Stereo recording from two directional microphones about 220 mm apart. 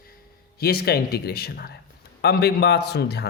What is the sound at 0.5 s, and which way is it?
A man's voice, 45° left (ahead or behind).